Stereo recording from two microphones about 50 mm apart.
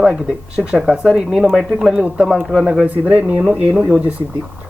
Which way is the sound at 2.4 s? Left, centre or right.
Centre.